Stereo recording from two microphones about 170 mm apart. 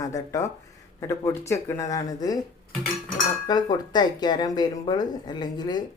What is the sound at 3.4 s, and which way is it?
Speech, 25° left (ahead or behind).